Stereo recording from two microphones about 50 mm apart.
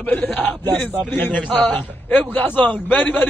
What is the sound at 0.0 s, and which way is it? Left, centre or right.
A man's voice, left.